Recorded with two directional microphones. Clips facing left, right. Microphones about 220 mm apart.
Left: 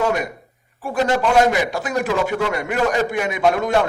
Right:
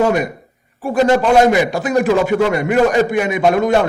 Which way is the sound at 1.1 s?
15° right (ahead or behind).